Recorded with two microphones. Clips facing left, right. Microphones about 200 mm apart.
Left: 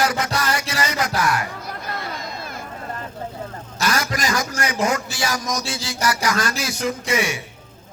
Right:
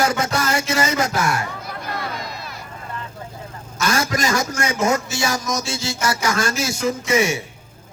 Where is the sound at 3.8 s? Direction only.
25° right (ahead or behind).